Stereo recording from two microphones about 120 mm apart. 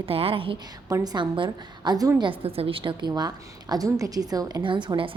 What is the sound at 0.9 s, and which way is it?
A woman's voice, 35° right (ahead or behind).